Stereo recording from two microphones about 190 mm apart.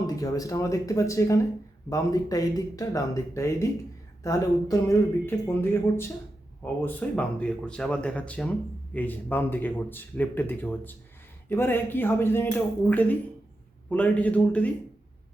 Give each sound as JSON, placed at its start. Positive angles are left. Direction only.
{"t": 0.2, "sound": "speech", "side_deg": 20}